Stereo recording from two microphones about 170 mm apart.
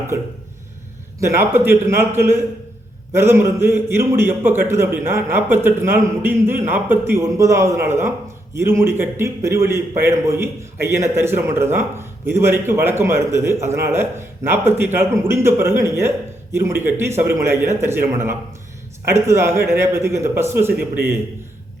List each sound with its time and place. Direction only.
0.1 s a man's voice: 15° right (ahead or behind)